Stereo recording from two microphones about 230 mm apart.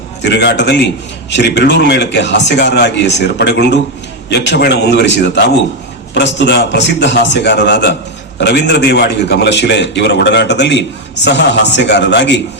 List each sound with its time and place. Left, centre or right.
0.2 s a man's voice: left